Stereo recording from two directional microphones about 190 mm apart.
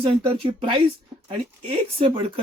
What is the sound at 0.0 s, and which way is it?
Speech, 25° right (ahead or behind).